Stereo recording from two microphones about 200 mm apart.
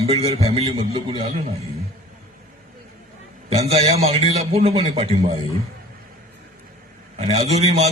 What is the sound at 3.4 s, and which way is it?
A man's voice, 30° right (ahead or behind).